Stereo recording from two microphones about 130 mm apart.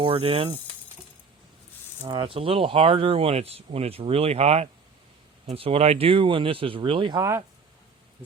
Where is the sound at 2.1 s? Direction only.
40° right (ahead or behind).